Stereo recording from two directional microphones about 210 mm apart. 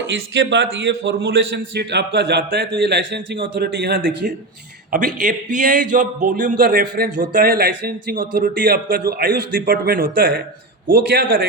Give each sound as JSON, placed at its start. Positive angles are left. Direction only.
{"t": 0.3, "sound": "a man's voice", "side_deg": -60}
{"t": 3.6, "sound": "a man's voice", "side_deg": -45}